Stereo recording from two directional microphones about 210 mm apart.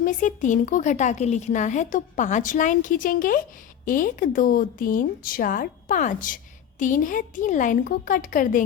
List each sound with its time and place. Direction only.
0.0 s a woman's voice: 40° left (ahead or behind)